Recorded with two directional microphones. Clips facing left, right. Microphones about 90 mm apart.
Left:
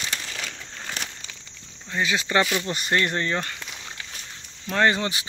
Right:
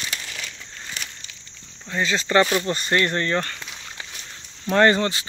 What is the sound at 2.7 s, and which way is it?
Speech, 15° left (ahead or behind).